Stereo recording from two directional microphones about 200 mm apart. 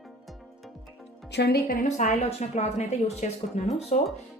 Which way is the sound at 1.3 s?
55° left (ahead or behind).